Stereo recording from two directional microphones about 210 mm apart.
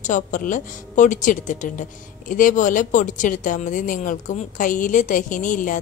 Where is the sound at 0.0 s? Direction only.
40° left (ahead or behind).